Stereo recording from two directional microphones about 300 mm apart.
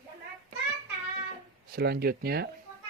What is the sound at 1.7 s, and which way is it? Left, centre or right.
Speech, right.